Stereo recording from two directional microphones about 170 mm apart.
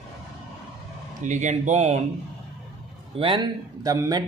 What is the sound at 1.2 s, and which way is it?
Speech, 45° right (ahead or behind).